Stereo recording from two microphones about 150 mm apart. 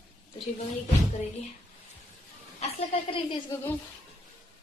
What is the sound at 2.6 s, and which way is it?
Speech, 40° left (ahead or behind).